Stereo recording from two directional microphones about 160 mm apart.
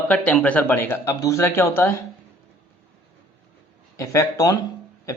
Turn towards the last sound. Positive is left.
turn(degrees=20)  # may be behind; listen again after turning